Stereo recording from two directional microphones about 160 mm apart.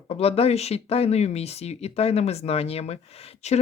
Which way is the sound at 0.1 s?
35° left (ahead or behind).